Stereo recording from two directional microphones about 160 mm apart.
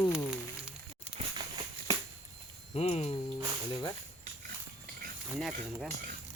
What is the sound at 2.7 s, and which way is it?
Speech, 45° left (ahead or behind).